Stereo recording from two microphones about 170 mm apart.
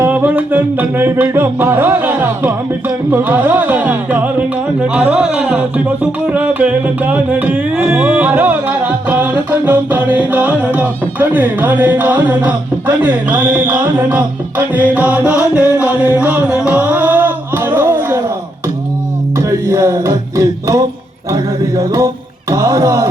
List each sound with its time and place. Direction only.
0.0 s music: 10° right (ahead or behind)
12.5 s speech: 10° right (ahead or behind)
19.4 s music: 15° right (ahead or behind)